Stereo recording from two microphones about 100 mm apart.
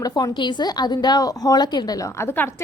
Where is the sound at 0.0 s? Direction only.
45° left (ahead or behind).